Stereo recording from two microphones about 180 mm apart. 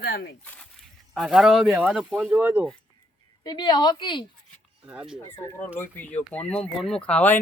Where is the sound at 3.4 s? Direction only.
25° left (ahead or behind).